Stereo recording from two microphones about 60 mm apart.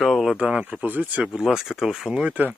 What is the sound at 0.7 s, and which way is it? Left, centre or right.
Speech, right.